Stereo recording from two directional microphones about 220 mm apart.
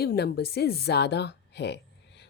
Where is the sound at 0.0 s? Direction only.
45° left (ahead or behind).